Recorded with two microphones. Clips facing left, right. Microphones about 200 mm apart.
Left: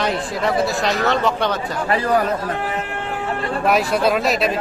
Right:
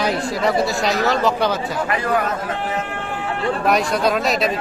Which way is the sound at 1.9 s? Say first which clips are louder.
Left 4 dB; 35° left (ahead or behind).